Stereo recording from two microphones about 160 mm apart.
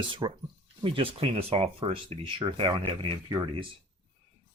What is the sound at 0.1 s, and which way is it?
Speech, 30° right (ahead or behind).